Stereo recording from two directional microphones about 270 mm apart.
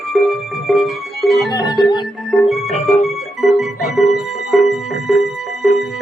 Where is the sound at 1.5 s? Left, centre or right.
Centre.